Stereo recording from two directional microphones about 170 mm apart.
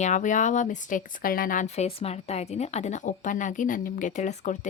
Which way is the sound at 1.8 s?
40° left (ahead or behind).